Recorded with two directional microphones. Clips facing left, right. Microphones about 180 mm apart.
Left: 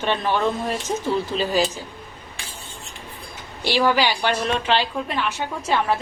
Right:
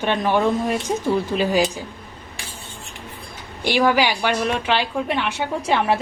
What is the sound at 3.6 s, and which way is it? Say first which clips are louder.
Speech: right 2 dB; 10° right (ahead or behind).